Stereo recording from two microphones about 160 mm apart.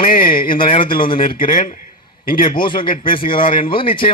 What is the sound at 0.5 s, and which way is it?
Speech, 35° left (ahead or behind).